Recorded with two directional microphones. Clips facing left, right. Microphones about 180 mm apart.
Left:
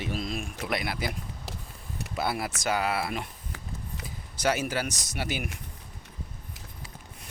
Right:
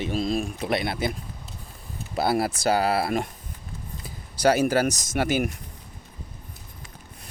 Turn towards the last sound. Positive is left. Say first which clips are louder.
# right 9 dB
turn(degrees=-45)  # may be behind; listen again after turning